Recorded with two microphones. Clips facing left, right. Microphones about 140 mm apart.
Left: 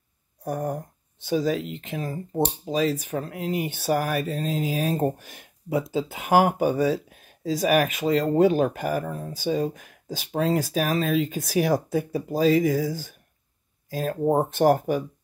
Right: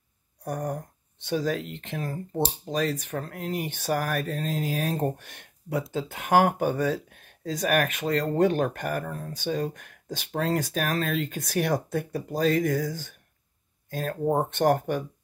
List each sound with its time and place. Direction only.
0.4 s speech: 5° left (ahead or behind)